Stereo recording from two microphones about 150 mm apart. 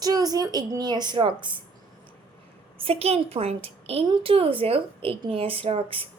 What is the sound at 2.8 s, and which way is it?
A woman's voice, 40° right (ahead or behind).